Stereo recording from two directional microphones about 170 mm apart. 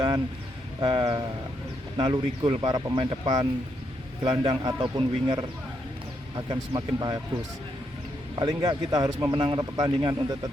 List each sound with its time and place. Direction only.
0.8 s speech: 30° right (ahead or behind)
8.4 s speech: 25° right (ahead or behind)